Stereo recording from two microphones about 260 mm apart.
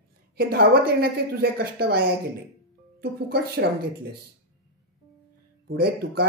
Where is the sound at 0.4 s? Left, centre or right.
Right.